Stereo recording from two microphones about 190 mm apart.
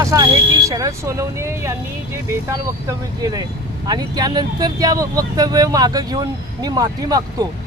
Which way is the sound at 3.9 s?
20° right (ahead or behind).